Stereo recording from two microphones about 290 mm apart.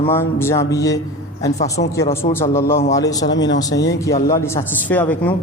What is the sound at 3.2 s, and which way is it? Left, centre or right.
Speech, left.